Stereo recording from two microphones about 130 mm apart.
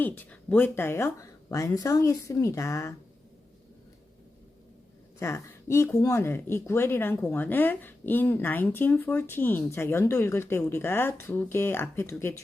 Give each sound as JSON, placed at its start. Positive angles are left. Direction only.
{"t": 0.0, "sound": "speech", "side_deg": 15}
{"t": 5.2, "sound": "speech", "side_deg": 20}